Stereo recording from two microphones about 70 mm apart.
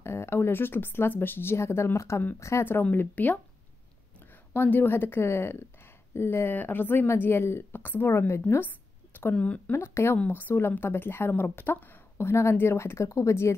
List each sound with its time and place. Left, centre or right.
0.0 s a woman's voice: left
2.6 s speech: left
4.6 s a woman's voice: left
9.1 s speech: left
9.7 s a woman's voice: left